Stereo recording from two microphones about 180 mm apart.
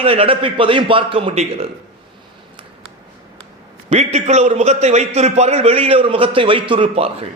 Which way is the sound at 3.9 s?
40° right (ahead or behind).